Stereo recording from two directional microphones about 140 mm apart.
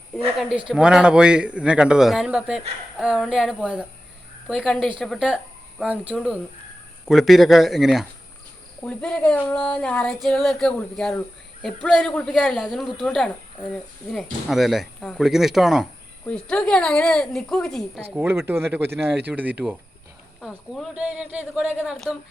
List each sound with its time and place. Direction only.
0.1 s a woman's voice: 5° right (ahead or behind)
5.8 s speech: 10° right (ahead or behind)
8.8 s a sound: 10° left (ahead or behind)
11.6 s speech: centre (ahead or behind)
18.1 s speech: 15° right (ahead or behind)
20.4 s speech: centre (ahead or behind)